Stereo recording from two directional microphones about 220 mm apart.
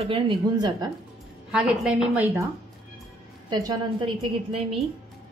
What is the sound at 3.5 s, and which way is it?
Speech, 20° right (ahead or behind).